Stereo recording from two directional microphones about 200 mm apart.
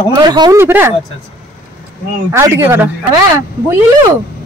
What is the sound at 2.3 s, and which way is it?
Speech, 15° right (ahead or behind).